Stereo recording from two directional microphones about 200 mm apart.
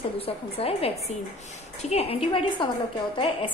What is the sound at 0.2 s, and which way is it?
A woman's voice, 30° left (ahead or behind).